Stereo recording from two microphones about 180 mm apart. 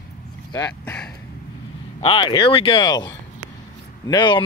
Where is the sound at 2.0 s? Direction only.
30° left (ahead or behind).